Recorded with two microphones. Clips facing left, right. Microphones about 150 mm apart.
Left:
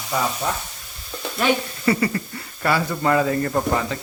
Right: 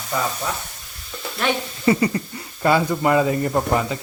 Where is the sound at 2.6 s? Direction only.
20° right (ahead or behind).